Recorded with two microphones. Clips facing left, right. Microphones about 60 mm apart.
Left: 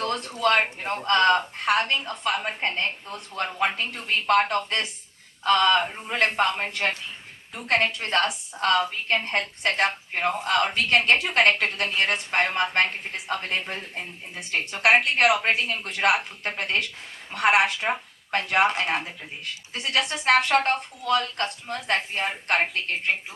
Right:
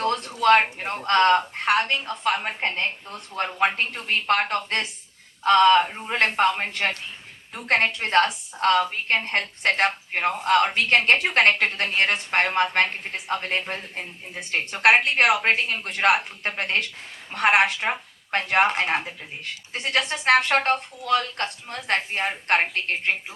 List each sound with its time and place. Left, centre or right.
0.0 s a sound: right
1.0 s a woman's voice: right
7.7 s a woman's voice: right